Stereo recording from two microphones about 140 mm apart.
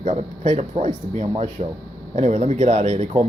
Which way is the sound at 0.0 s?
55° right (ahead or behind).